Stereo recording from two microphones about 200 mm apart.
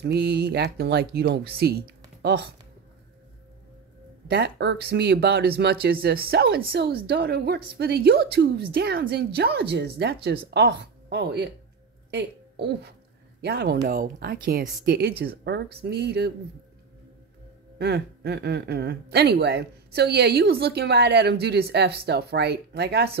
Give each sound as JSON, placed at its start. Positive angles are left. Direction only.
{"t": 0.0, "sound": "a woman's voice", "side_deg": -55}
{"t": 4.3, "sound": "speech", "side_deg": -60}
{"t": 17.7, "sound": "a woman's voice", "side_deg": -55}